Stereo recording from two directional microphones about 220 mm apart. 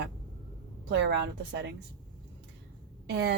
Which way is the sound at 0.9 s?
50° right (ahead or behind).